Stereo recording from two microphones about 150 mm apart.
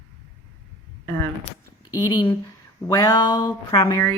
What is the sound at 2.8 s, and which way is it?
Speech, 25° left (ahead or behind).